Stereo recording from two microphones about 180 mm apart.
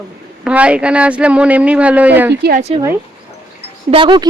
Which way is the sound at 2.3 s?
65° right (ahead or behind).